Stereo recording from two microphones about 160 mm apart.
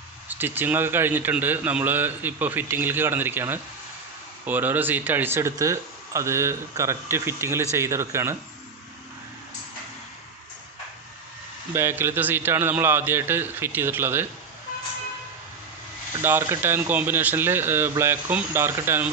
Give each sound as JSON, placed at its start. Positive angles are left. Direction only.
{"t": 0.3, "sound": "a man's voice", "side_deg": -10}
{"t": 11.7, "sound": "a man's voice", "side_deg": -15}
{"t": 16.2, "sound": "a man's voice", "side_deg": -15}